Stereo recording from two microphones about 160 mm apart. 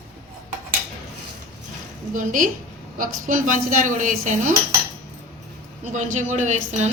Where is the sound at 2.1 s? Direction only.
55° right (ahead or behind).